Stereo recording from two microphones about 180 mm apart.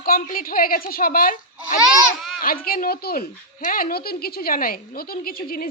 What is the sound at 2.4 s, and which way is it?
Female singing, 55° left (ahead or behind).